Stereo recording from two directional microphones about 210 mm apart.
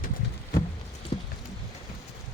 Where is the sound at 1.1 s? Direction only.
25° left (ahead or behind).